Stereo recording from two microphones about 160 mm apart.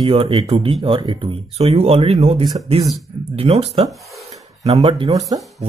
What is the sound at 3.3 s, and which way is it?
Speech, 40° right (ahead or behind).